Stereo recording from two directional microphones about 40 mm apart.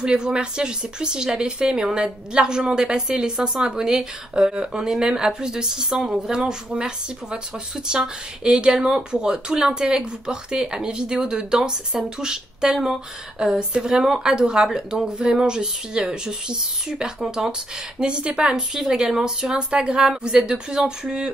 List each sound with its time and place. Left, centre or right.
0.0 s a woman's voice: right
18.8 s a woman's voice: centre